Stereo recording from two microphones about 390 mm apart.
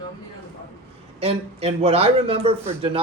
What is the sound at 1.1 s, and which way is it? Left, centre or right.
A man's voice, centre.